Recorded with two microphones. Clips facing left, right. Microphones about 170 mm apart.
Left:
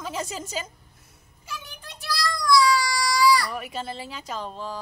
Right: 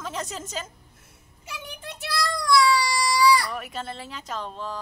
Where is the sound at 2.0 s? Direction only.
25° right (ahead or behind).